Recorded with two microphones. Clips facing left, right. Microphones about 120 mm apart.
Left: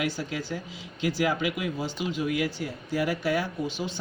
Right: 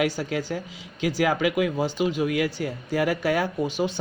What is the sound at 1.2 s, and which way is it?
Speech, 55° right (ahead or behind).